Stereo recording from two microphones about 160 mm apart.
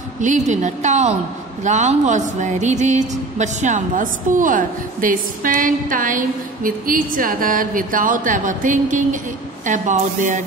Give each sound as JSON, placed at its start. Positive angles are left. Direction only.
{"t": 0.2, "sound": "a woman's voice", "side_deg": -50}